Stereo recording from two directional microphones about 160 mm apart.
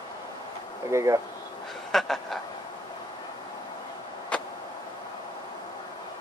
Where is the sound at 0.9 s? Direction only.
20° right (ahead or behind).